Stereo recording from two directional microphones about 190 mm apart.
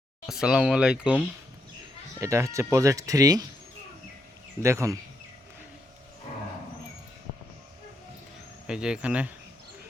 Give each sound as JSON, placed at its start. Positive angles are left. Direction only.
{"t": 0.3, "sound": "speech", "side_deg": -5}
{"t": 2.2, "sound": "speech", "side_deg": -15}
{"t": 4.6, "sound": "speech", "side_deg": -15}
{"t": 8.6, "sound": "speech", "side_deg": -5}